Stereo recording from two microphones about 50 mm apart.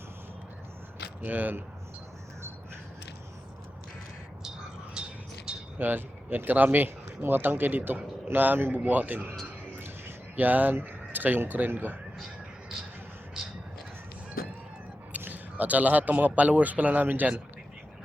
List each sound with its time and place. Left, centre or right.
1.3 s speech: right
5.0 s a sound: centre
5.8 s speech: right
8.7 s speech: right
10.3 s speech: right
10.8 s a sound: right
11.4 s speech: right
15.2 s speech: right